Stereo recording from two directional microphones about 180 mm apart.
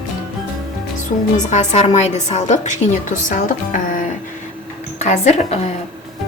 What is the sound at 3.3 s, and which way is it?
Music, 50° left (ahead or behind).